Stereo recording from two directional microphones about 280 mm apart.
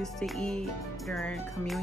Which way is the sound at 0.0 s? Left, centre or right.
Centre.